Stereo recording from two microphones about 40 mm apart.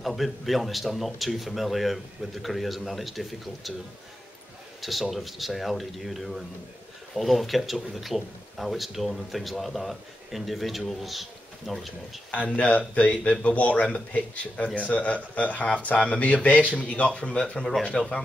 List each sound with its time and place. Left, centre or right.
0.0 s speech: centre
5.1 s speech: centre
12.4 s speech: left